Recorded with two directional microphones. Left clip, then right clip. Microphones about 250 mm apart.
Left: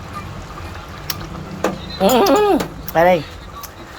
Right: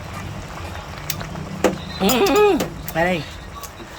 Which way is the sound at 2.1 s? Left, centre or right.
Centre.